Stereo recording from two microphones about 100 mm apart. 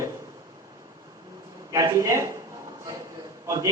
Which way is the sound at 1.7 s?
35° right (ahead or behind).